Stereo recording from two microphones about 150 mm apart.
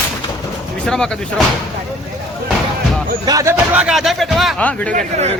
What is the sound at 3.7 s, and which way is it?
A man's voice, 5° right (ahead or behind).